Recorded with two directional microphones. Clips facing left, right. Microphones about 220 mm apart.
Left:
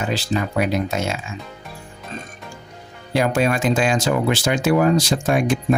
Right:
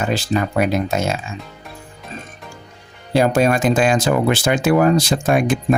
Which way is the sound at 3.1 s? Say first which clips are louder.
Right 4 dB; 35° right (ahead or behind).